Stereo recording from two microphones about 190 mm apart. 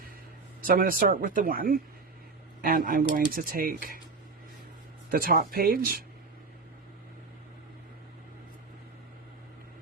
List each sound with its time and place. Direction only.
0.7 s speech: 50° right (ahead or behind)
5.1 s speech: 50° right (ahead or behind)